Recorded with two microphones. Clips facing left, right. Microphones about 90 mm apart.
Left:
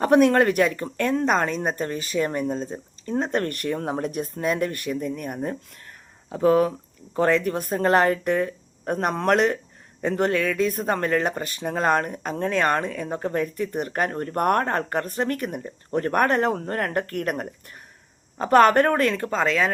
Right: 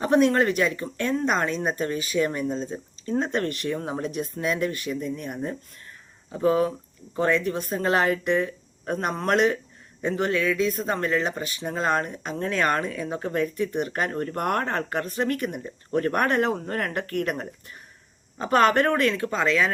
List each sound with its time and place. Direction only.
0.0 s speech: 60° left (ahead or behind); by 19.7 s 40° left (ahead or behind)